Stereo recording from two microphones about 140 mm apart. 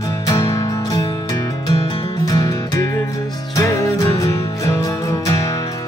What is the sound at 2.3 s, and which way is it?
Music, 25° left (ahead or behind).